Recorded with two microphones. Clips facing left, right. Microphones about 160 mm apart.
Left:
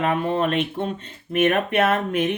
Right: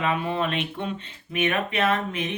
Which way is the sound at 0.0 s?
50° left (ahead or behind).